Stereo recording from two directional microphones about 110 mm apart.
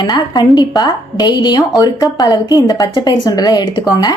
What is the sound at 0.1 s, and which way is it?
A woman's voice, 40° left (ahead or behind).